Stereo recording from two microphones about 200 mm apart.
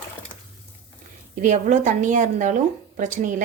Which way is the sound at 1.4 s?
40° right (ahead or behind).